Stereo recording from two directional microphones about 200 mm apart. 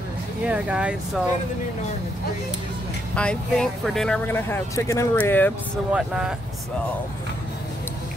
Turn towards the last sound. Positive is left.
turn(degrees=-5)  # may be behind; listen again after turning